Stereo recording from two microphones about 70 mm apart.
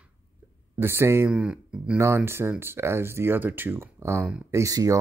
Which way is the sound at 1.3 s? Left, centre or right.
Centre.